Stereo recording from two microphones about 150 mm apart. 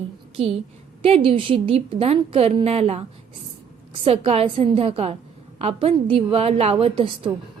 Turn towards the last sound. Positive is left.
turn(degrees=-35)  # may be behind; listen again after turning